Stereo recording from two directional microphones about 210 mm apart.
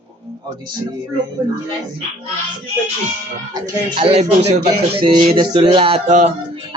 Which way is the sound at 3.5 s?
25° right (ahead or behind).